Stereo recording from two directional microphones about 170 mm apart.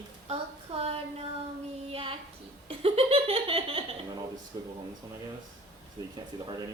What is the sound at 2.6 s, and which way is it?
Laughter, 35° right (ahead or behind).